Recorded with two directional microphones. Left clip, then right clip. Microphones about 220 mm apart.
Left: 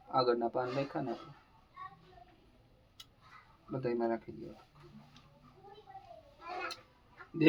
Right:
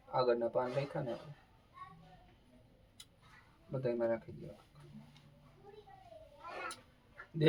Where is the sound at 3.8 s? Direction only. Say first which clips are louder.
Even; 35° left (ahead or behind).